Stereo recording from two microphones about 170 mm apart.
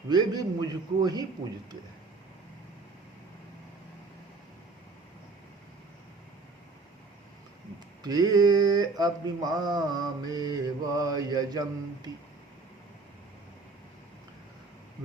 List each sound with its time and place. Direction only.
0.1 s mantra: 25° right (ahead or behind)
8.0 s mantra: 25° right (ahead or behind)